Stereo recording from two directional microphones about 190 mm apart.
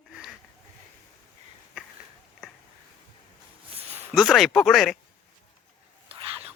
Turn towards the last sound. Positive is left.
turn(degrees=-30)  # may be behind; listen again after turning